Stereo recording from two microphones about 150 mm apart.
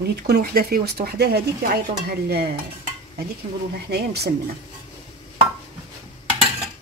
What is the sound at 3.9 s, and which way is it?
Speech, 90° right.